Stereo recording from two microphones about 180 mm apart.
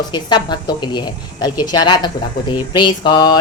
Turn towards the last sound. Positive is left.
turn(degrees=25)  # may be behind; listen again after turning